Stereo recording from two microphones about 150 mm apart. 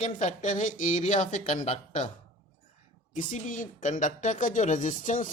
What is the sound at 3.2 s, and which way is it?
Speech, 60° left (ahead or behind).